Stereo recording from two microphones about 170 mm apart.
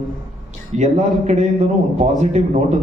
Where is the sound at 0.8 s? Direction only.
45° right (ahead or behind).